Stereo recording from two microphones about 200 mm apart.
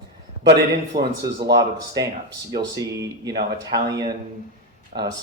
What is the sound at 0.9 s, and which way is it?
Speech, 50° right (ahead or behind).